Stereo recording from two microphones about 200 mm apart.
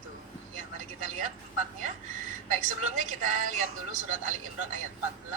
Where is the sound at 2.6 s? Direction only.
40° right (ahead or behind).